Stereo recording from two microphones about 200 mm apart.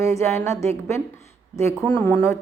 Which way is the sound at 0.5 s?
30° right (ahead or behind).